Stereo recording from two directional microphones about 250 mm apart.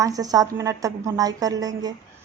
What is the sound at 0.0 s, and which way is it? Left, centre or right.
A woman's voice, centre.